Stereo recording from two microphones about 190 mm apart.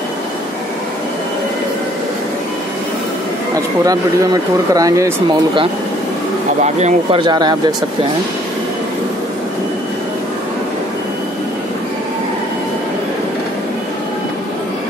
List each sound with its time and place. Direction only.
3.8 s speech: 20° right (ahead or behind)
6.6 s speech: 35° right (ahead or behind)